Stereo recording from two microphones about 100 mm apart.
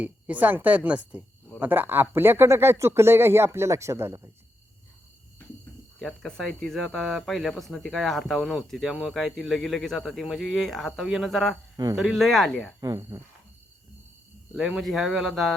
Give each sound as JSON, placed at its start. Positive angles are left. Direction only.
{"t": 0.0, "sound": "speech", "side_deg": -15}
{"t": 6.0, "sound": "speech", "side_deg": 5}
{"t": 12.8, "sound": "speech", "side_deg": -35}
{"t": 14.5, "sound": "speech", "side_deg": -5}